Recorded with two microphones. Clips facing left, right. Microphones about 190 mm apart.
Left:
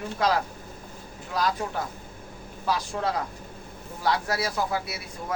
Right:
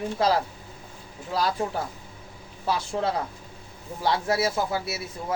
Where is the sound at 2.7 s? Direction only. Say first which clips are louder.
Right 1 dB; 25° right (ahead or behind).